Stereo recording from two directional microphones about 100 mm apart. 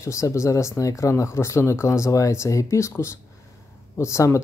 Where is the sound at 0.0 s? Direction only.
30° left (ahead or behind).